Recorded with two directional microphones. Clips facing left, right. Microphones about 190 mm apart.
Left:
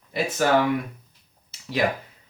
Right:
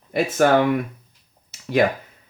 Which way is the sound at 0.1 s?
50° right (ahead or behind).